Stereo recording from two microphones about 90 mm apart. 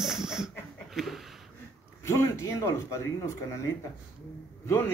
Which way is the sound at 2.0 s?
30° left (ahead or behind).